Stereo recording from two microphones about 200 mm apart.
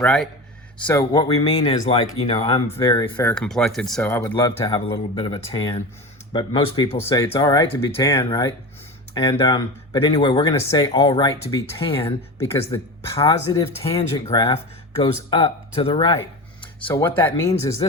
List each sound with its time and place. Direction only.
0.0 s speech: 5° left (ahead or behind)
0.9 s speech: 15° left (ahead or behind)
2.6 s speech: 15° left (ahead or behind)
5.2 s speech: 30° left (ahead or behind)
8.2 s speech: 25° left (ahead or behind)
12.4 s speech: 15° left (ahead or behind)
16.6 s a sound: 25° left (ahead or behind)
17.2 s speech: 10° left (ahead or behind)